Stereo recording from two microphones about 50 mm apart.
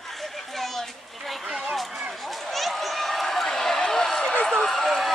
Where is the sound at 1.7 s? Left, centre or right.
Centre.